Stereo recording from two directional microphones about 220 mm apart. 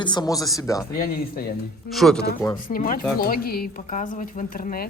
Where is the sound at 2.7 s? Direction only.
40° left (ahead or behind).